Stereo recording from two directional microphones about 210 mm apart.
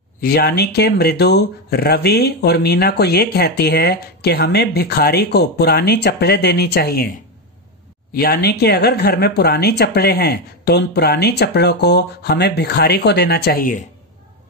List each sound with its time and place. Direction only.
0.2 s speech: 45° left (ahead or behind)
8.1 s speech: 45° left (ahead or behind)